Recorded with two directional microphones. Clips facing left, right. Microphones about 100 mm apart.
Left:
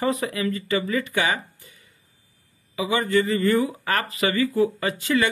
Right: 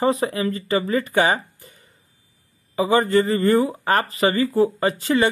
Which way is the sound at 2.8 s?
35° right (ahead or behind).